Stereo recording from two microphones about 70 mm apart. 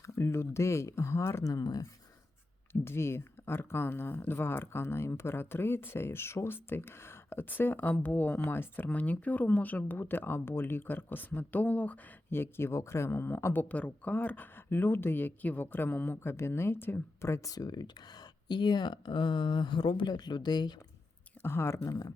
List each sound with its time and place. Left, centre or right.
0.0 s speech: left
1.6 s speech: left
2.8 s speech: left
17.5 s speech: left
21.4 s speech: left
21.8 s speech: left